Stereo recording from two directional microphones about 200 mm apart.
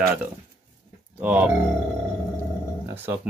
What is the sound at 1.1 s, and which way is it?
Speech, 10° right (ahead or behind).